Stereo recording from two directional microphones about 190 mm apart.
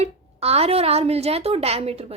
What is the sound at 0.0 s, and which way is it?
A woman's voice, 35° right (ahead or behind).